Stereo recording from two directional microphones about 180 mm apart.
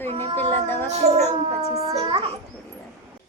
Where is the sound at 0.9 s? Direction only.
40° right (ahead or behind).